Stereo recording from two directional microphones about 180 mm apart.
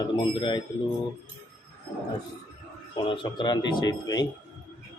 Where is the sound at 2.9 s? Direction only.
25° left (ahead or behind).